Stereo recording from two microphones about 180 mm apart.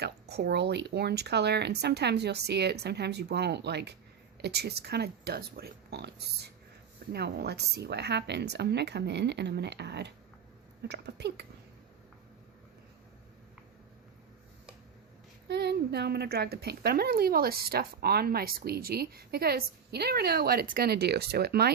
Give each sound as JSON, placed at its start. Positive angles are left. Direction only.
{"t": 0.0, "sound": "a woman's voice", "side_deg": -65}
{"t": 15.4, "sound": "a woman's voice", "side_deg": -65}